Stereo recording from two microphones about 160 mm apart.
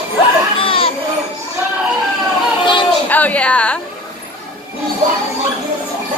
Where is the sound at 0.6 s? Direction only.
35° left (ahead or behind).